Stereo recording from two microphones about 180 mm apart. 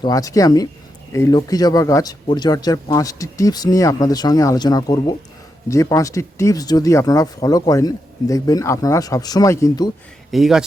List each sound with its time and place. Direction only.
0.0 s speech: 20° left (ahead or behind)
10.3 s speech: 5° right (ahead or behind)